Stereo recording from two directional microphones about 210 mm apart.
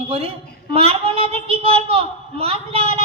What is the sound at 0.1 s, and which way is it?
A woman's voice, 30° right (ahead or behind).